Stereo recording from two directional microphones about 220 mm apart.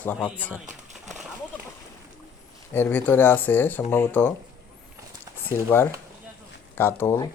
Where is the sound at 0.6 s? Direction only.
35° right (ahead or behind).